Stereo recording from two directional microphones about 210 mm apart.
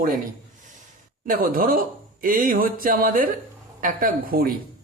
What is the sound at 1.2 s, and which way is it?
Speech, 45° right (ahead or behind).